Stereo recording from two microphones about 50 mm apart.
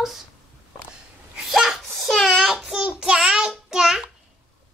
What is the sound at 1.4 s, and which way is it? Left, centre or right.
Sneeze, centre.